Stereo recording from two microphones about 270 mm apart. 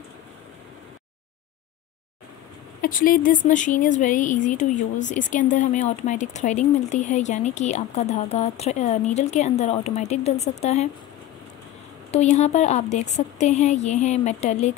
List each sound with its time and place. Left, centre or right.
2.8 s speech: left
12.1 s speech: left